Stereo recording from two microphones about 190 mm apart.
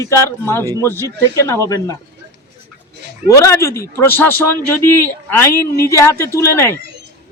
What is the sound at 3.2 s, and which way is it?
A man's voice, 15° left (ahead or behind).